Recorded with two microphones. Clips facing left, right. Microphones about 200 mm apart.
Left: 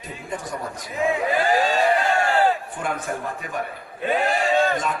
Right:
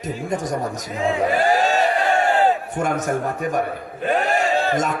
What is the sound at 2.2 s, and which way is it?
Battle cry, 20° right (ahead or behind).